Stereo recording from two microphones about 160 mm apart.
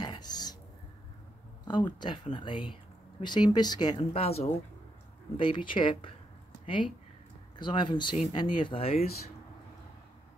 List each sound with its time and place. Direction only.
0.0 s a sound: 25° left (ahead or behind)
1.7 s speech: 25° left (ahead or behind)
4.1 s speech: 40° left (ahead or behind)